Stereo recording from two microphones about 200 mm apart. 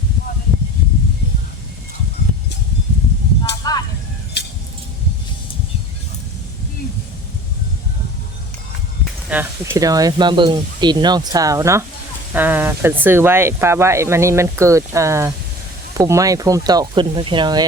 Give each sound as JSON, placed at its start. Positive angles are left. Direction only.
{"t": 3.6, "sound": "a sound", "side_deg": 20}
{"t": 4.4, "sound": "keys jangling", "side_deg": 60}
{"t": 9.3, "sound": "speech", "side_deg": -10}